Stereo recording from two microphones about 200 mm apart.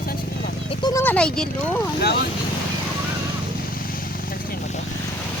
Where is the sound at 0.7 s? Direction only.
20° left (ahead or behind).